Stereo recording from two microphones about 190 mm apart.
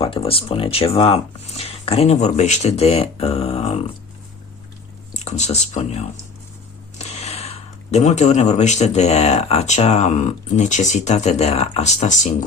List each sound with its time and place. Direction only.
0.0 s speech: 30° left (ahead or behind)
5.1 s speech: 35° left (ahead or behind)